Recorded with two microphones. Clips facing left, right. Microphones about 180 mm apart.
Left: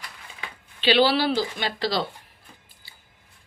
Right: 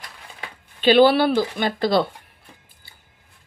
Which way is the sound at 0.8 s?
50° right (ahead or behind).